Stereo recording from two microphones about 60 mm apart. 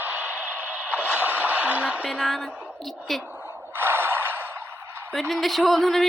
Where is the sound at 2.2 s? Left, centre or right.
Centre.